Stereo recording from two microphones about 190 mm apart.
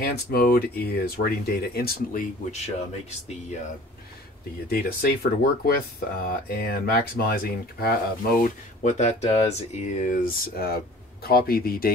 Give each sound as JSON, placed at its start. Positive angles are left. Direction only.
{"t": 0.0, "sound": "speech", "side_deg": 55}
{"t": 4.6, "sound": "speech", "side_deg": 55}